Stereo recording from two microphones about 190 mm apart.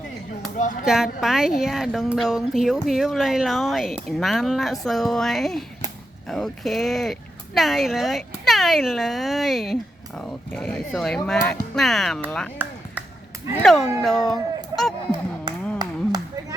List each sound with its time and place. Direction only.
0.5 s speech: 40° left (ahead or behind)
0.9 s speech: centre (ahead or behind)
12.6 s a sound: 10° right (ahead or behind)
13.6 s speech: centre (ahead or behind)
15.5 s a sound: 25° right (ahead or behind)
15.8 s clapping: 20° right (ahead or behind)